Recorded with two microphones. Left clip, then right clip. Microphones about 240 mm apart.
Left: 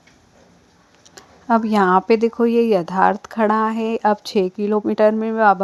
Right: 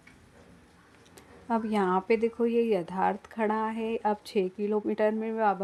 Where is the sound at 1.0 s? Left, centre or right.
Left.